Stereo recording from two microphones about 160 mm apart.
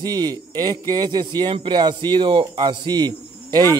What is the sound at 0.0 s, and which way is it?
Speech, 25° right (ahead or behind).